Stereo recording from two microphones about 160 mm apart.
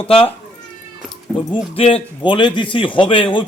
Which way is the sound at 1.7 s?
35° left (ahead or behind).